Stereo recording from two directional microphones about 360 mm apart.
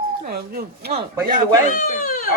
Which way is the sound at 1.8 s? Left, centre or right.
Left.